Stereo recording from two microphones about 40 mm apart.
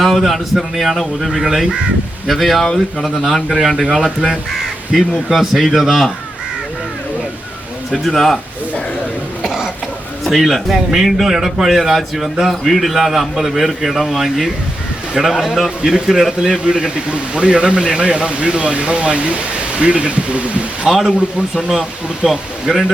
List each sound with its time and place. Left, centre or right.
0.0 s a man's voice: centre
4.9 s a man's voice: centre
8.0 s a man's voice: centre
9.4 s cough: centre
10.2 s a man's voice: centre
15.8 s a man's voice: centre
16.6 s speech: right
20.8 s a man's voice: centre